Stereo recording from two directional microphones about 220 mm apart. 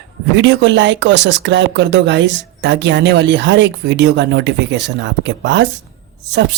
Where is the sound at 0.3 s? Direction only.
55° right (ahead or behind).